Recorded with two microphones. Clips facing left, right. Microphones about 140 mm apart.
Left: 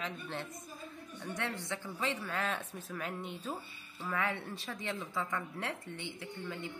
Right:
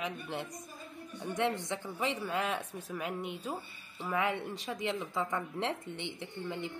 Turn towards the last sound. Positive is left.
turn(degrees=-20)  # may be behind; listen again after turning